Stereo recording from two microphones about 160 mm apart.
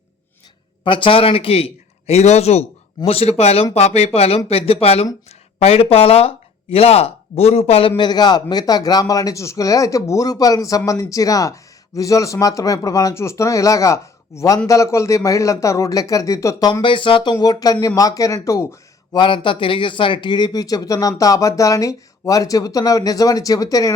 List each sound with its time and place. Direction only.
0.9 s speech: 30° left (ahead or behind)
19.2 s speech: 30° left (ahead or behind)